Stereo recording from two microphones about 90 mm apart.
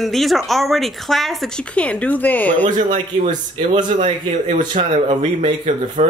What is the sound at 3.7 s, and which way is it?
Speech, 60° right (ahead or behind).